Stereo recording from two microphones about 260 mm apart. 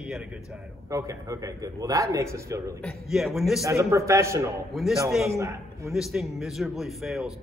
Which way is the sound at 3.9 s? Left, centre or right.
Centre.